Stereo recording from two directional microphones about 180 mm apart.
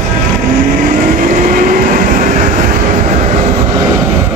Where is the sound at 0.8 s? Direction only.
50° right (ahead or behind).